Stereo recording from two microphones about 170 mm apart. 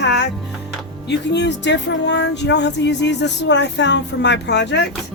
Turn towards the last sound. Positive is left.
turn(degrees=90)